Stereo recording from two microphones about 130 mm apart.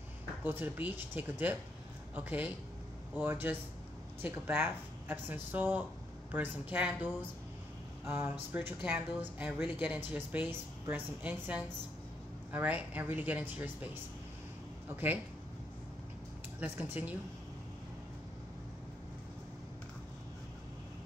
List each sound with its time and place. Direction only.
0.4 s speech: 15° right (ahead or behind)
16.5 s speech: 15° right (ahead or behind)